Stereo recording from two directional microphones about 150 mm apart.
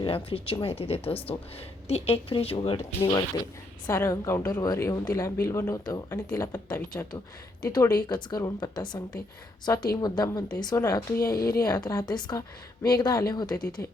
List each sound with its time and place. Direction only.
0.0 s speech: 40° left (ahead or behind)
3.8 s speech: 20° left (ahead or behind)
11.3 s speech: 85° left
11.9 s speech: 25° left (ahead or behind)